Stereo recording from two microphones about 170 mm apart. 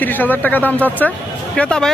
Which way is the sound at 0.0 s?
10° left (ahead or behind).